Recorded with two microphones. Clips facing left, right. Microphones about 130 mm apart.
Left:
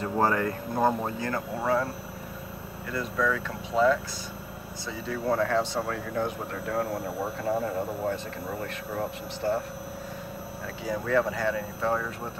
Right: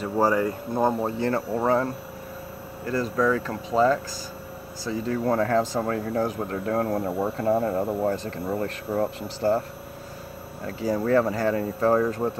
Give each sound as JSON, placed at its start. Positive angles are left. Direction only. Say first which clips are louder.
{"t": 0.0, "sound": "speech", "louder": "right 3 dB", "side_deg": -15}
{"t": 1.3, "sound": "speech", "louder": "right 3 dB", "side_deg": -35}
{"t": 2.9, "sound": "speech", "louder": "right 5 dB", "side_deg": -40}
{"t": 10.8, "sound": "speech", "louder": "right 5 dB", "side_deg": -40}